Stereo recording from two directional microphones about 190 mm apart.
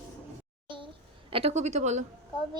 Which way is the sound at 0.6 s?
25° right (ahead or behind).